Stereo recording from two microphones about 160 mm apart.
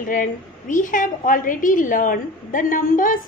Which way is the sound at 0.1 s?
55° left (ahead or behind).